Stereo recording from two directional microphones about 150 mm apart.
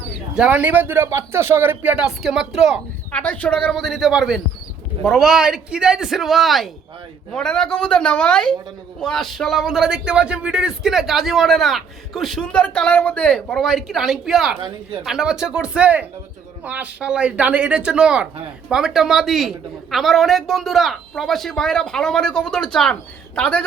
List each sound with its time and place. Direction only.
0.3 s speech: 10° right (ahead or behind)
14.6 s speech: 30° right (ahead or behind)
15.0 s speech: 5° right (ahead or behind)